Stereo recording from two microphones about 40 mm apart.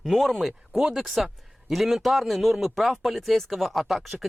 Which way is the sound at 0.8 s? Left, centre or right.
Centre.